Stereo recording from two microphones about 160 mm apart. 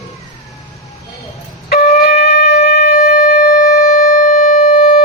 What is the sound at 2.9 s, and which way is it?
Shofar, 60° left (ahead or behind).